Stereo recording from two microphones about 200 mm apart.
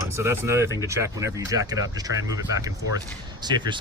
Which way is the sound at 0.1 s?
15° right (ahead or behind).